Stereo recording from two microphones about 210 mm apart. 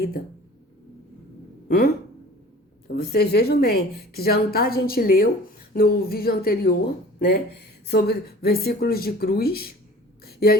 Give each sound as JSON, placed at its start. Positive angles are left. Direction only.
{"t": 1.6, "sound": "a woman's voice", "side_deg": 45}